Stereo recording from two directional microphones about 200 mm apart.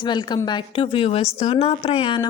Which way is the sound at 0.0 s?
20° left (ahead or behind).